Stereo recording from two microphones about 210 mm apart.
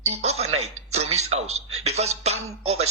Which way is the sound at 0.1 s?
30° right (ahead or behind).